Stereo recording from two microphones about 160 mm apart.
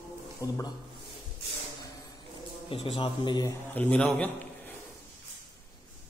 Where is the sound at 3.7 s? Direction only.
5° left (ahead or behind).